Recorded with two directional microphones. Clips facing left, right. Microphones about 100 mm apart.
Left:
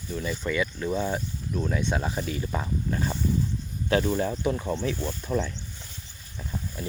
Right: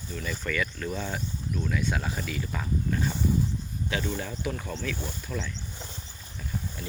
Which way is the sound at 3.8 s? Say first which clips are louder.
Left 8 dB; 40° left (ahead or behind).